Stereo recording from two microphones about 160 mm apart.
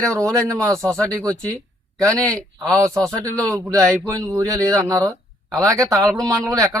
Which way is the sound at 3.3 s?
20° right (ahead or behind).